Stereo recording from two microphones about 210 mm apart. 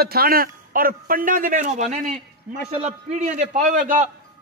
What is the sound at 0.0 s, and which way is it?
A man's voice, 45° right (ahead or behind).